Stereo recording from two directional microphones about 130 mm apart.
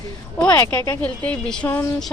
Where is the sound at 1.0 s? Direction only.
10° left (ahead or behind).